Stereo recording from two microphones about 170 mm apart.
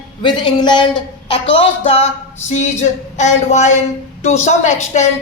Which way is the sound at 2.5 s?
45° left (ahead or behind).